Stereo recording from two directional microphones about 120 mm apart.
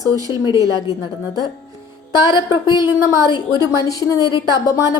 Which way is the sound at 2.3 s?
35° left (ahead or behind).